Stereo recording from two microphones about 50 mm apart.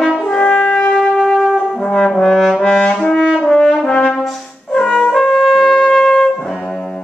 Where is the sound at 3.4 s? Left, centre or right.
Centre.